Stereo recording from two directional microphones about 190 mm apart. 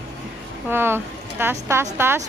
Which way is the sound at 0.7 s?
10° right (ahead or behind).